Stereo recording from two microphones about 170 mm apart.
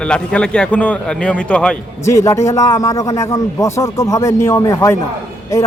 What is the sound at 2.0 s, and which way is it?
A man's voice, 15° left (ahead or behind).